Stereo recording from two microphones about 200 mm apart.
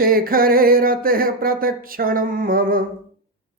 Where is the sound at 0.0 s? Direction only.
45° right (ahead or behind).